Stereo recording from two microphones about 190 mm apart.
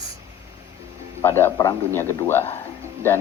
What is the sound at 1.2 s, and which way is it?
A man's voice, 10° left (ahead or behind).